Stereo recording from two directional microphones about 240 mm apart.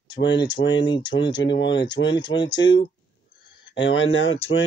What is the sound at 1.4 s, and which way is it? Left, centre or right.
Speech, left.